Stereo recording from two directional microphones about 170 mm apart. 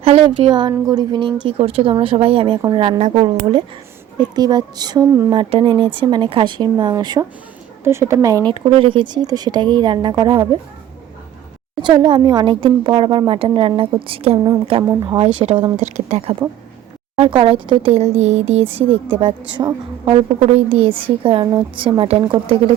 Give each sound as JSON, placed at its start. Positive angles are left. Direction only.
{"t": 0.0, "sound": "a woman's voice", "side_deg": -35}
{"t": 8.4, "sound": "a woman's voice", "side_deg": -30}
{"t": 11.8, "sound": "a woman's voice", "side_deg": -25}
{"t": 15.8, "sound": "a woman's voice", "side_deg": -45}